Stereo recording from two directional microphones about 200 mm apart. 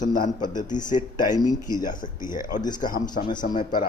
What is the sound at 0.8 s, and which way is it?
Speech, 40° left (ahead or behind).